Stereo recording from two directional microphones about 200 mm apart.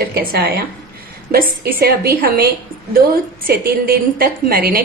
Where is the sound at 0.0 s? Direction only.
50° right (ahead or behind).